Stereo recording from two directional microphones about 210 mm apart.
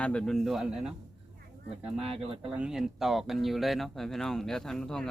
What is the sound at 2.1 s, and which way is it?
Speech, 25° right (ahead or behind).